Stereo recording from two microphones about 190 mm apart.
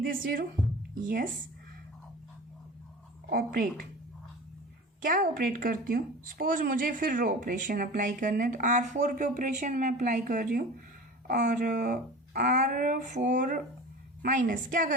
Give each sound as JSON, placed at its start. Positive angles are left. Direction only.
{"t": 0.0, "sound": "a woman's voice", "side_deg": -50}
{"t": 3.2, "sound": "a woman's voice", "side_deg": -50}
{"t": 5.0, "sound": "a woman's voice", "side_deg": -45}